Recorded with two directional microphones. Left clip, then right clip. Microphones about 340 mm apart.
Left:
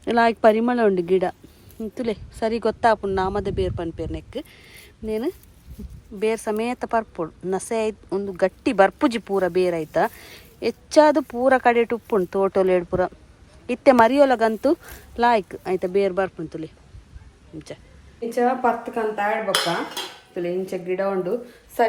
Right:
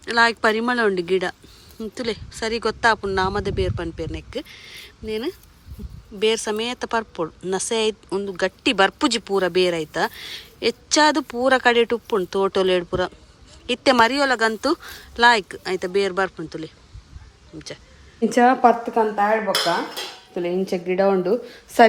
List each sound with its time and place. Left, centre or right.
0.0 s speech: centre
18.3 s a woman's voice: right
20.3 s a woman's voice: right